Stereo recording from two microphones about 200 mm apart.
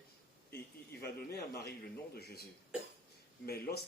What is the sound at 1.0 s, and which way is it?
A man's voice, 55° left (ahead or behind).